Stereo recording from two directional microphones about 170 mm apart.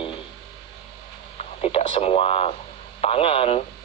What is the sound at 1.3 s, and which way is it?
Speech, 40° left (ahead or behind).